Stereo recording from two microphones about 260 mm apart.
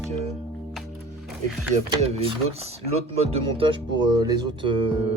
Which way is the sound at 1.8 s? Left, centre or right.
Right.